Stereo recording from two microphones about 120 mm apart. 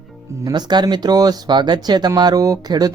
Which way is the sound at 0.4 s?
35° right (ahead or behind).